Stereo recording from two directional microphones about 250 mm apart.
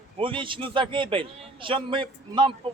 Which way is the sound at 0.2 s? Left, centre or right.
Centre.